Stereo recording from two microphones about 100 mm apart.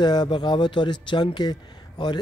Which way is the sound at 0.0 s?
45° left (ahead or behind).